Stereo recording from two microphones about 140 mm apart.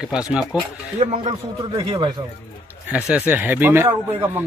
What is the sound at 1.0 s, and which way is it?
Speech, 35° right (ahead or behind).